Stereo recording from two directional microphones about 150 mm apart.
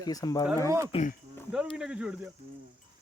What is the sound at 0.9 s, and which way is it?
Speech, 40° left (ahead or behind).